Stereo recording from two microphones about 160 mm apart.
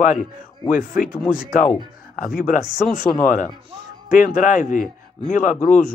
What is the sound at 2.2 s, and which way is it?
A man's voice, 60° left (ahead or behind).